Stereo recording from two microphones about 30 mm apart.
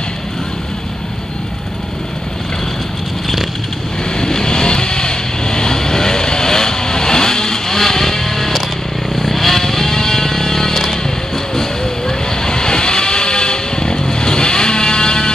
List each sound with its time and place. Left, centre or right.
4.2 s vehicle: left; by 9.6 s centre
9.6 s music: centre